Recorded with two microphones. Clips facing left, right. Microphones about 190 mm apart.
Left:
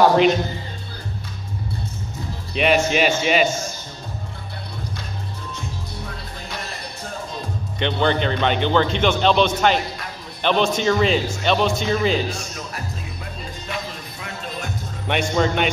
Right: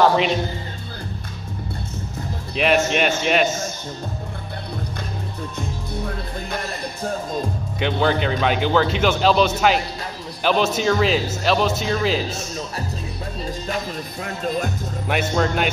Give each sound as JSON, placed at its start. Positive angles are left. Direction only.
{"t": 2.5, "sound": "a man's voice", "side_deg": 0}
{"t": 7.8, "sound": "a man's voice", "side_deg": -5}
{"t": 12.3, "sound": "music", "side_deg": -20}
{"t": 15.0, "sound": "a man's voice", "side_deg": 0}